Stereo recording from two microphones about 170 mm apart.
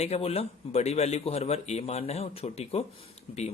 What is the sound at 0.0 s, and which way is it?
Speech, 40° left (ahead or behind).